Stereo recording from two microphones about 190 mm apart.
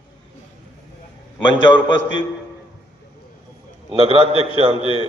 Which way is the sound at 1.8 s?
75° left (ahead or behind).